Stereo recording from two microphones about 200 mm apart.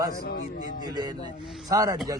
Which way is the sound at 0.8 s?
20° right (ahead or behind).